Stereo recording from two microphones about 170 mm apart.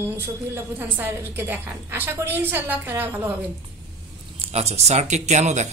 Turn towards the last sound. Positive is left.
turn(degrees=-45)  # may be behind; listen again after turning